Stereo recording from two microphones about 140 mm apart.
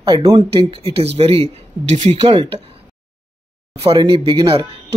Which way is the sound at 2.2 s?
40° right (ahead or behind).